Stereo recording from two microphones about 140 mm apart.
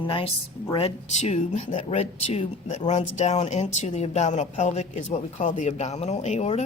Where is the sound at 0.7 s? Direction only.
50° left (ahead or behind).